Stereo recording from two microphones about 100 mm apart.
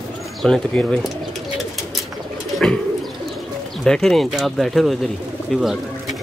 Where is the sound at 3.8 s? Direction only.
5° left (ahead or behind).